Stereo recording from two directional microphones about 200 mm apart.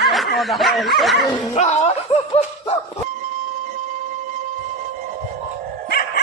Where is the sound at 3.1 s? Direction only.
40° right (ahead or behind).